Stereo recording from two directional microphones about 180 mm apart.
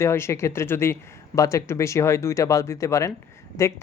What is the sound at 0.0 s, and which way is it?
Speech, 15° left (ahead or behind).